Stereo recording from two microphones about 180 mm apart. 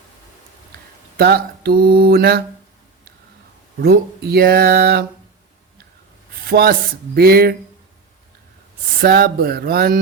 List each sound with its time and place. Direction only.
1.1 s mantra: 60° right (ahead or behind)
3.8 s mantra: 60° right (ahead or behind)
6.5 s mantra: 60° right (ahead or behind)
9.0 s mantra: 60° right (ahead or behind)